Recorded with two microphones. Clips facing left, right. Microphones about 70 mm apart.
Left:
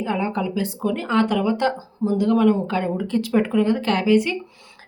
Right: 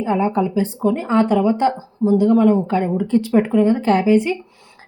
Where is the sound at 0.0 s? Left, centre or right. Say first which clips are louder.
Right 5 dB; right.